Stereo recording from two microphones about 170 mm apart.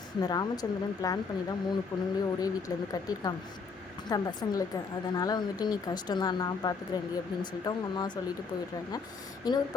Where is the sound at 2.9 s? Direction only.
20° left (ahead or behind).